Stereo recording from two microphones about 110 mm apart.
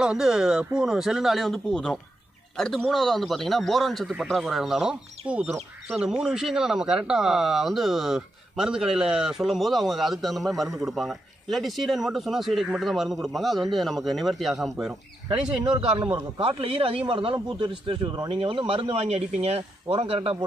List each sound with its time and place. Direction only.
0.0 s a man's voice: 5° right (ahead or behind)
16.1 s speech: 55° right (ahead or behind)
18.4 s speech: 55° right (ahead or behind)